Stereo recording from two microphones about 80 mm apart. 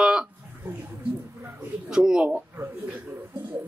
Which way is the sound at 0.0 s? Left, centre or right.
Centre.